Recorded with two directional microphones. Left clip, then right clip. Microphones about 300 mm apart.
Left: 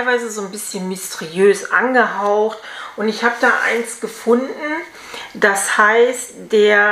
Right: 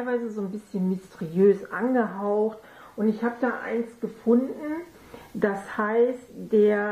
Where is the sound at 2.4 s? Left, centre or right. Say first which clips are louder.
Left 8 dB; left.